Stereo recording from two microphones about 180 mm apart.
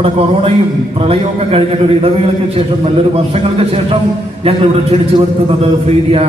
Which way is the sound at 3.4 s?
35° right (ahead or behind).